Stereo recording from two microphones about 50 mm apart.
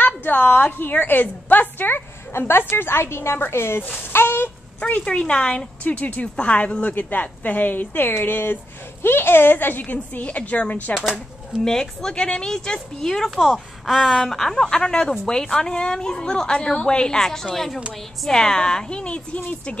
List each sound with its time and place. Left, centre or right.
0.0 s a woman's voice: left
4.1 s a sound: left
4.7 s speech: left
5.0 s a woman's voice: centre
11.6 s a woman's voice: centre
13.5 s a woman's voice: centre; by 19.8 s left